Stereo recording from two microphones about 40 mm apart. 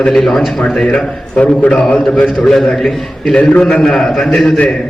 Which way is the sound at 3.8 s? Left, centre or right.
Centre.